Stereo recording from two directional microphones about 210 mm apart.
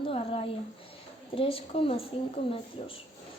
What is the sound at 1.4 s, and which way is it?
Speech, 25° left (ahead or behind).